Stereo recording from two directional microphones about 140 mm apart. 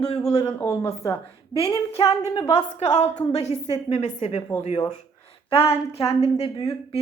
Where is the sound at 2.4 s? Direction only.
50° left (ahead or behind).